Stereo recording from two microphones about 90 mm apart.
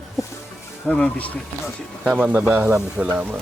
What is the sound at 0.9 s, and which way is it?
Speech, 10° left (ahead or behind).